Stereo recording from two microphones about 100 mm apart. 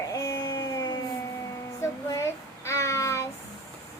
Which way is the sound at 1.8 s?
30° left (ahead or behind).